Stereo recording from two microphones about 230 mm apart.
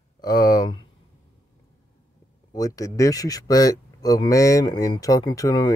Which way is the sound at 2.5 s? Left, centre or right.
Centre.